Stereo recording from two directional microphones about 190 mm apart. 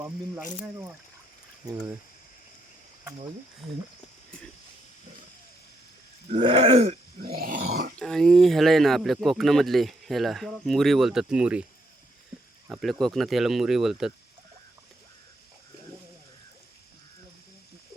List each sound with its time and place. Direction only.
6.4 s a sound: 25° right (ahead or behind)
7.2 s grunt: 50° right (ahead or behind)
7.9 s speech: 5° left (ahead or behind)
12.6 s speech: centre (ahead or behind)